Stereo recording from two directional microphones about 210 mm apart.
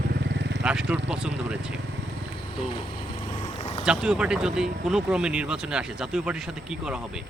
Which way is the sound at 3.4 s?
30° left (ahead or behind).